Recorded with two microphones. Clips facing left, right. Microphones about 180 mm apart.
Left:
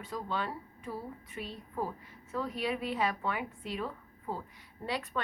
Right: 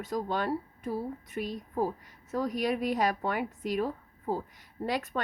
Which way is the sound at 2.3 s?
40° right (ahead or behind).